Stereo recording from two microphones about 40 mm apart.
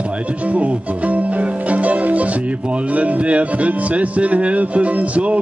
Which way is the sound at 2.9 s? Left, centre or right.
Right.